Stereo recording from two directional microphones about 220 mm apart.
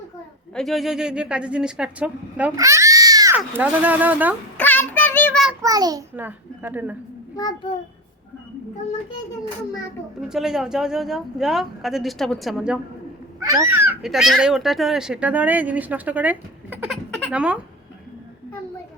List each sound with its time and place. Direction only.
0.5 s speech: centre (ahead or behind)
4.5 s child singing: 10° left (ahead or behind)
5.6 s speech: 15° right (ahead or behind)
7.3 s a child's voice: 15° left (ahead or behind)
10.2 s speech: centre (ahead or behind)
13.4 s speech: 15° right (ahead or behind)